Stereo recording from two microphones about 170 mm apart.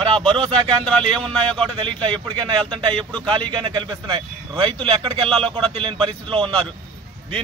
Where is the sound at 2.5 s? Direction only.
30° right (ahead or behind).